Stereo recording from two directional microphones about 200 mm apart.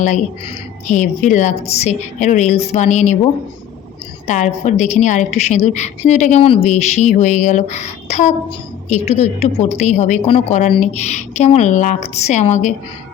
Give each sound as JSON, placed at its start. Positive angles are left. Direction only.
{"t": 0.0, "sound": "a woman's voice", "side_deg": 35}
{"t": 4.3, "sound": "a woman's voice", "side_deg": 35}